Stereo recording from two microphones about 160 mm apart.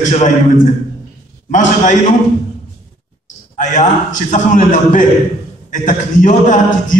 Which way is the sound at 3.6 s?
50° left (ahead or behind).